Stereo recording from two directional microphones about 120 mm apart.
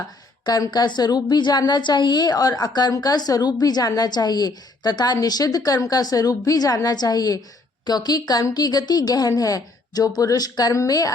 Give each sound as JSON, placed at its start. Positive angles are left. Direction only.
{"t": 0.4, "sound": "a woman's voice", "side_deg": 30}